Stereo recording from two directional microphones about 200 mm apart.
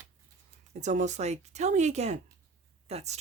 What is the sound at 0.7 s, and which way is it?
Speech, 35° right (ahead or behind).